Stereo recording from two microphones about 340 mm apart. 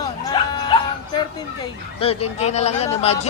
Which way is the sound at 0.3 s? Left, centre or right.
Centre.